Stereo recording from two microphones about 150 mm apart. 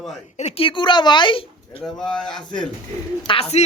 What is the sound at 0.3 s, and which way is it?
Speech, 45° left (ahead or behind).